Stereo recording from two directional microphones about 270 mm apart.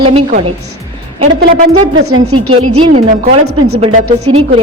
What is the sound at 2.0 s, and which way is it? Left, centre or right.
Speech, right.